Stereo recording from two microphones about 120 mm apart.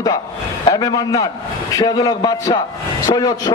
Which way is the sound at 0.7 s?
30° left (ahead or behind).